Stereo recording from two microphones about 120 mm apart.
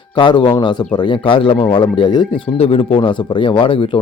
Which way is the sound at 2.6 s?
55° left (ahead or behind).